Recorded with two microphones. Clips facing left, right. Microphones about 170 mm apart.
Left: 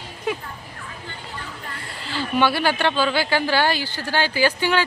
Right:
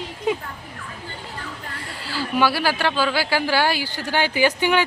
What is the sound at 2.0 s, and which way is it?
Speech, 5° right (ahead or behind).